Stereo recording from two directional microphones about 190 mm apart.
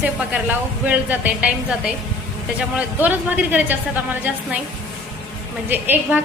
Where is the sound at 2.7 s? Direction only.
10° right (ahead or behind).